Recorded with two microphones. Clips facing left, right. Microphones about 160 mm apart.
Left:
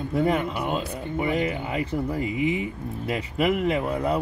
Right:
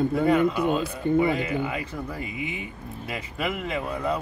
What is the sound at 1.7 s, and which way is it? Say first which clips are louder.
Speech: left 6 dB; 30° left (ahead or behind).